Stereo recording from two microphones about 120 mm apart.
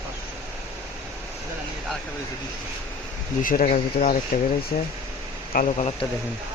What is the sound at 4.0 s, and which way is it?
Speech, 70° left (ahead or behind).